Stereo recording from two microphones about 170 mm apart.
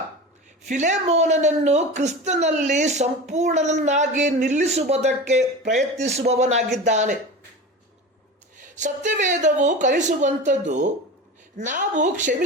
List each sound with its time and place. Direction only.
0.7 s speech: 45° right (ahead or behind)
8.7 s speech: 45° right (ahead or behind)